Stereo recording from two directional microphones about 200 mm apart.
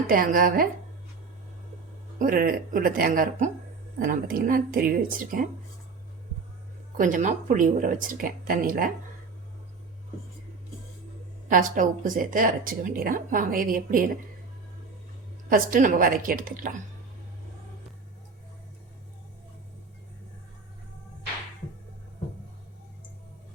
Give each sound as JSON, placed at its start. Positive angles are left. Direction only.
{"t": 0.1, "sound": "speech", "side_deg": -45}
{"t": 2.1, "sound": "speech", "side_deg": -45}
{"t": 6.9, "sound": "speech", "side_deg": -40}
{"t": 11.4, "sound": "speech", "side_deg": -40}
{"t": 15.4, "sound": "speech", "side_deg": -45}